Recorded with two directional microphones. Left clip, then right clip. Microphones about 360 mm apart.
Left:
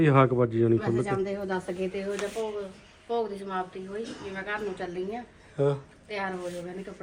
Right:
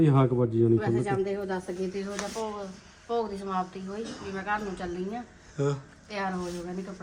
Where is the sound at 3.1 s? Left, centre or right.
Centre.